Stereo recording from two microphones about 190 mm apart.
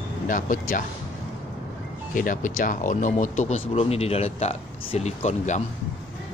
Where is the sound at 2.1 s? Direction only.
45° left (ahead or behind).